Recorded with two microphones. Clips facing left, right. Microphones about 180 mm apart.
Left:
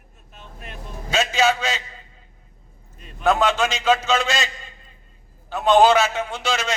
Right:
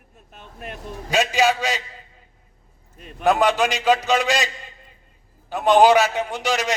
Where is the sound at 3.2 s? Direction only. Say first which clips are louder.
Right 1 dB; 15° right (ahead or behind).